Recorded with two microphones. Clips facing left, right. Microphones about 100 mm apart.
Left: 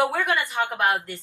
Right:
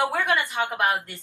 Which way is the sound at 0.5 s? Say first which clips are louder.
Left 1 dB; 10° right (ahead or behind).